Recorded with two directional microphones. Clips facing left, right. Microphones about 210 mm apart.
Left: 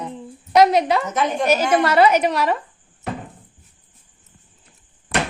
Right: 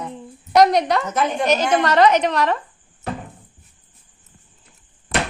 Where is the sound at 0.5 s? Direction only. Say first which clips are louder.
Even; 5° left (ahead or behind).